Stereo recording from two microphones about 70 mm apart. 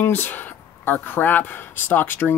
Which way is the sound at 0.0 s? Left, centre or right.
Left.